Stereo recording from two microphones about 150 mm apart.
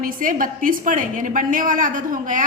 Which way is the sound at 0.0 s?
70° right (ahead or behind).